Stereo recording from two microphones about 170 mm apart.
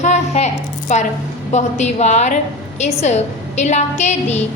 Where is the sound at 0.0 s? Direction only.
40° left (ahead or behind).